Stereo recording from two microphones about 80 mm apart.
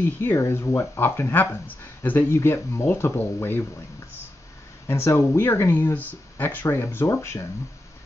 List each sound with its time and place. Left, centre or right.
0.0 s speech: left
4.8 s speech: left